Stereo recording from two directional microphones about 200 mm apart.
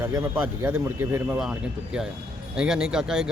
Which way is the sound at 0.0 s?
15° right (ahead or behind).